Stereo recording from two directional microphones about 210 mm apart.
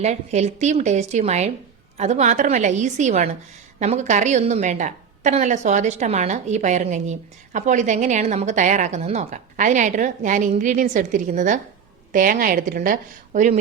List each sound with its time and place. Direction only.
0.0 s a woman's voice: 30° right (ahead or behind)